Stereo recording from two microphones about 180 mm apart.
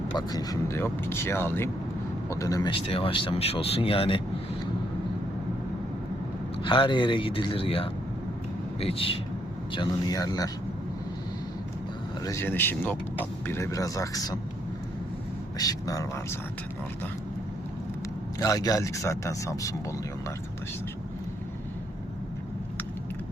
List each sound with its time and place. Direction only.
0.1 s speech: 20° left (ahead or behind)
6.6 s speech: 30° left (ahead or behind)
12.2 s speech: 15° left (ahead or behind)
15.5 s speech: 20° left (ahead or behind)
18.3 s speech: 20° left (ahead or behind)